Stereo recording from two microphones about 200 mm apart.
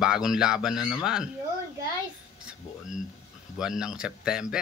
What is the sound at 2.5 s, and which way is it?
Speech, centre (ahead or behind).